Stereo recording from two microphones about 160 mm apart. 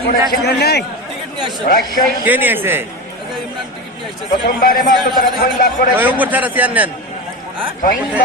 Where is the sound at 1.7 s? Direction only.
65° left (ahead or behind).